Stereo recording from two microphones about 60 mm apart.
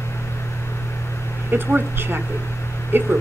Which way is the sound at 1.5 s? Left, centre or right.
Right.